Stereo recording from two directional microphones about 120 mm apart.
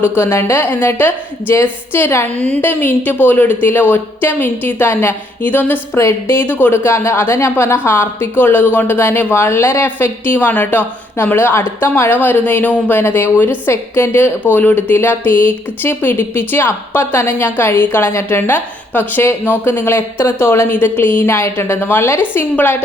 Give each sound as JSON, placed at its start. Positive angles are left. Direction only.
{"t": 0.2, "sound": "a woman's voice", "side_deg": 20}